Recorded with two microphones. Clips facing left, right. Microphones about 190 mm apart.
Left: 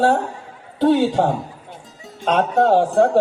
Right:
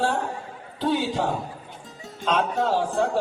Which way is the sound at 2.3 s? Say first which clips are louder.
Left 7 dB; 60° left (ahead or behind).